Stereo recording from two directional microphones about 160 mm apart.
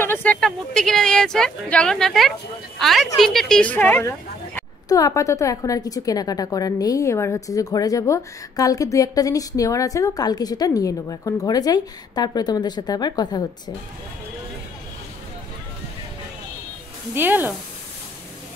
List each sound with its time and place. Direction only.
0.0 s a woman's voice: 10° left (ahead or behind)
17.1 s speech: 10° right (ahead or behind)